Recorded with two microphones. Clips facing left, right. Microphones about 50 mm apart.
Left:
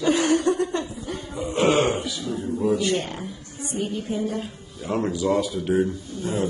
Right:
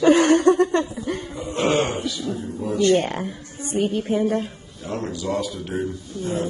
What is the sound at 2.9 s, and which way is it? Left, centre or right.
Speech, right.